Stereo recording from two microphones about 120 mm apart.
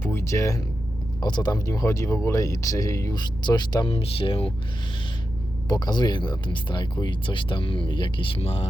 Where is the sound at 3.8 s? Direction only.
50° left (ahead or behind).